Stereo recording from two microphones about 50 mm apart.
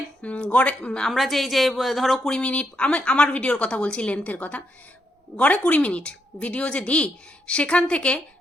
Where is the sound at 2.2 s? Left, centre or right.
Centre.